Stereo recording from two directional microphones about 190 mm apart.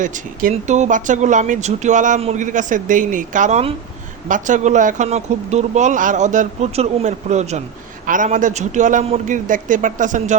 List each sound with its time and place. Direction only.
0.0 s speech: 45° right (ahead or behind)